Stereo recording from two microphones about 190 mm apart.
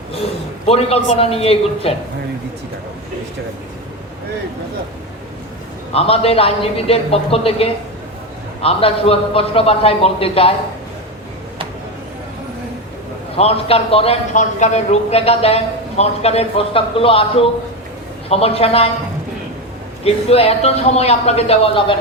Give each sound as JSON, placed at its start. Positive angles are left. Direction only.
{"t": 0.6, "sound": "a man's voice", "side_deg": 30}
{"t": 5.9, "sound": "a man's voice", "side_deg": 30}
{"t": 13.3, "sound": "a man's voice", "side_deg": 30}
{"t": 20.1, "sound": "a man's voice", "side_deg": 30}